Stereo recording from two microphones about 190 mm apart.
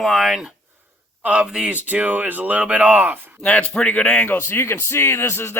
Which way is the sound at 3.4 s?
5° left (ahead or behind).